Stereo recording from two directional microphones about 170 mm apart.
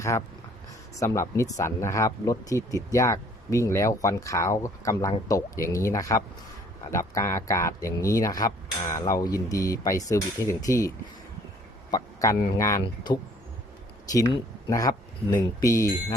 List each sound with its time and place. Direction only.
0.9 s speech: 20° left (ahead or behind)
11.9 s a sound: 20° left (ahead or behind)
12.5 s speech: 15° left (ahead or behind)
14.7 s speech: 20° left (ahead or behind)